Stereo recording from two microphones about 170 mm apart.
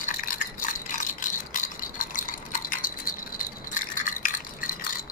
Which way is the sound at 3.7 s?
55° left (ahead or behind).